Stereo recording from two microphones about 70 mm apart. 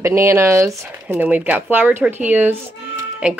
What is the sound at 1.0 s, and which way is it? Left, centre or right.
Speech, right.